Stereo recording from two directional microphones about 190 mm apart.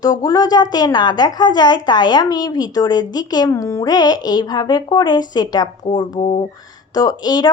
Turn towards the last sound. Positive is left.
turn(degrees=20)  # may be behind; listen again after turning